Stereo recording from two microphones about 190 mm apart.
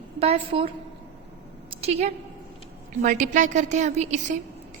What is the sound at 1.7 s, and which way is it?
A woman's voice, 35° right (ahead or behind).